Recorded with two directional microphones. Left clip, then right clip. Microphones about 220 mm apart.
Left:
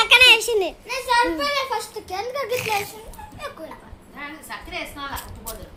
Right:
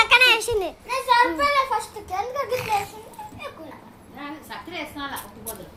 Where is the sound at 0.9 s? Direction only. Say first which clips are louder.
Right 3 dB; 35° left (ahead or behind).